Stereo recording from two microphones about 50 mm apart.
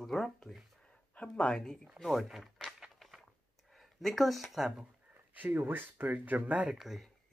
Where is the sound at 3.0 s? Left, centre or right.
Centre.